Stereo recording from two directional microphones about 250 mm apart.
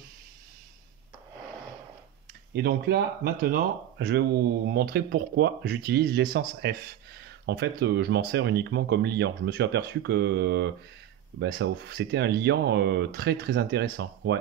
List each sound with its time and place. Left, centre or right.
2.5 s speech: right